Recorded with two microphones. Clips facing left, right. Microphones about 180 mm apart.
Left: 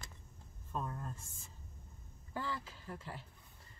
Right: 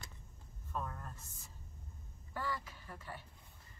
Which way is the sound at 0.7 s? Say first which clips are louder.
Left 1 dB; 25° left (ahead or behind).